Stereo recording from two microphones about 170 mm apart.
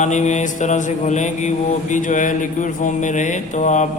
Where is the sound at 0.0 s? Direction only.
45° left (ahead or behind).